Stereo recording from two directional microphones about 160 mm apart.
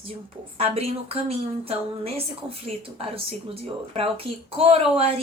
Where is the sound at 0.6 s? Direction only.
40° right (ahead or behind).